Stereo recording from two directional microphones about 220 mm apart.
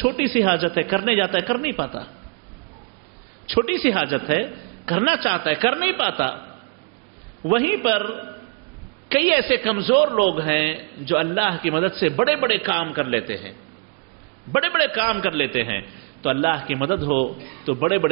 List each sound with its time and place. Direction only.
0.0 s a man's voice: 10° right (ahead or behind)
3.4 s a man's voice: 10° right (ahead or behind)
7.4 s a man's voice: 10° right (ahead or behind)
14.5 s a man's voice: 10° right (ahead or behind)
17.0 s a man's voice: 35° right (ahead or behind)